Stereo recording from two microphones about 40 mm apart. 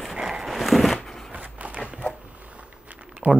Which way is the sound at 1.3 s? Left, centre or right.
Right.